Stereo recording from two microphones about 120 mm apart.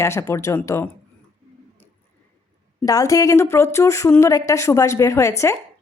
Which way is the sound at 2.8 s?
30° left (ahead or behind).